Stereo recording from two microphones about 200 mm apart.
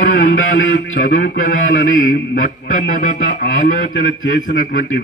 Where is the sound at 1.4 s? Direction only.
40° left (ahead or behind).